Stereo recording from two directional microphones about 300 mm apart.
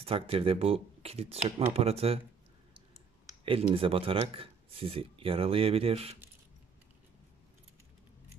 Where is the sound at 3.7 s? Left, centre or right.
Centre.